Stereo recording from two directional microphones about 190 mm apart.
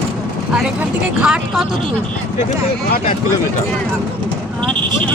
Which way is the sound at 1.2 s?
5° right (ahead or behind).